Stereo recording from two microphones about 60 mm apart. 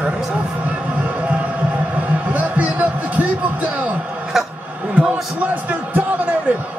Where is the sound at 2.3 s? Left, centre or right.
Right.